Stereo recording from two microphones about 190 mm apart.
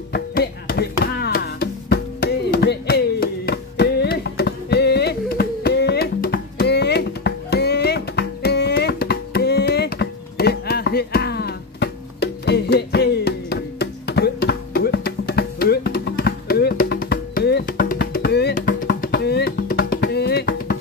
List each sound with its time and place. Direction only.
0.1 s music: 55° left (ahead or behind)